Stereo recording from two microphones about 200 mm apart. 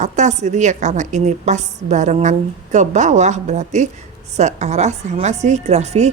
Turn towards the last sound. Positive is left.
turn(degrees=-35)  # may be behind; listen again after turning